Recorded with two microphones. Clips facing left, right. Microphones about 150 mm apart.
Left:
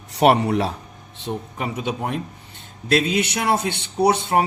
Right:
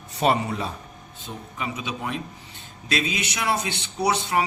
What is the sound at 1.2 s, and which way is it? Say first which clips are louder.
Speech: left 6 dB; 60° left (ahead or behind).